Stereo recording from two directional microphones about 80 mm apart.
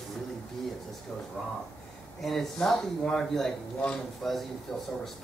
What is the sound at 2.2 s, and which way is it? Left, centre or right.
A man's voice, centre.